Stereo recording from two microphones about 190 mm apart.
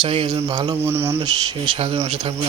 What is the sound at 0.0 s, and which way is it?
A man's voice, 25° right (ahead or behind).